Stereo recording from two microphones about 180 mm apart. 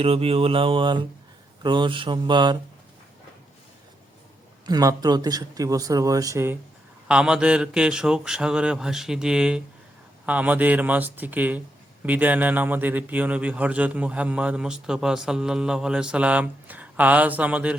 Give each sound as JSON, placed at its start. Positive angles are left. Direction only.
{"t": 0.0, "sound": "a man's voice", "side_deg": -30}
{"t": 4.6, "sound": "a man's voice", "side_deg": -20}